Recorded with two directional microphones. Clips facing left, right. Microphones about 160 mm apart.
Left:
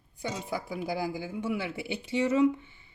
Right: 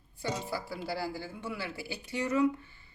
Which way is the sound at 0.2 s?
15° left (ahead or behind).